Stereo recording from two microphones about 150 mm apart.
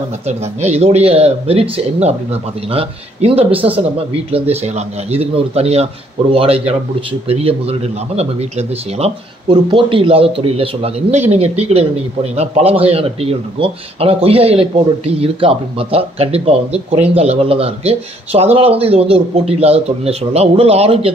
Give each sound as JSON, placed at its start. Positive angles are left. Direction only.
{"t": 0.3, "sound": "a man's voice", "side_deg": -45}